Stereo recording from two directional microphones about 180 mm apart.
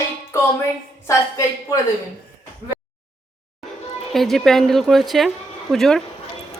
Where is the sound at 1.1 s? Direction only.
15° left (ahead or behind).